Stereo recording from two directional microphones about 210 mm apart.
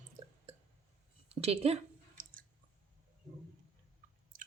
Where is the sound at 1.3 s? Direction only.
30° right (ahead or behind).